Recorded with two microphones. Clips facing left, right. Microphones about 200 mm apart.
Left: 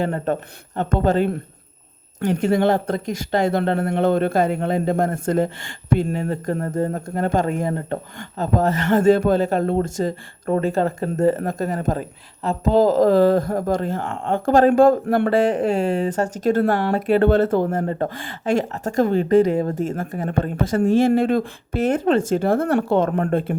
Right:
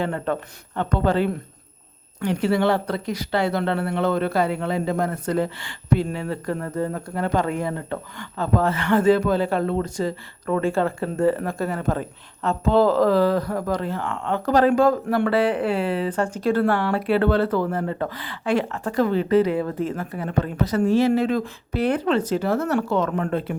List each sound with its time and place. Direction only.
0.0 s a man's voice: 40° left (ahead or behind)